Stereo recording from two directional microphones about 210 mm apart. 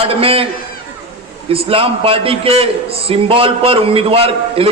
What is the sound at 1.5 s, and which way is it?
A man's voice, 25° right (ahead or behind).